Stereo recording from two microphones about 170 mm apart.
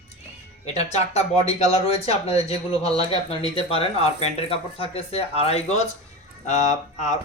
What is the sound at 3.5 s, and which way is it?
Speech, 35° left (ahead or behind).